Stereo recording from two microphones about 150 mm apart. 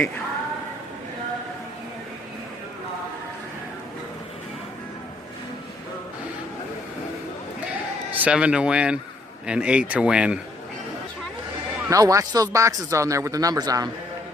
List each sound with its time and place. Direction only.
8.2 s speech: 5° right (ahead or behind)
11.9 s speech: 20° right (ahead or behind)